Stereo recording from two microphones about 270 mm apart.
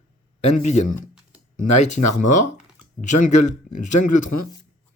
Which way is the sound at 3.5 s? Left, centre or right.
Left.